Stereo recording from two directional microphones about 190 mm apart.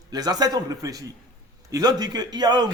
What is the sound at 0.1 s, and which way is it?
Speech, 20° right (ahead or behind).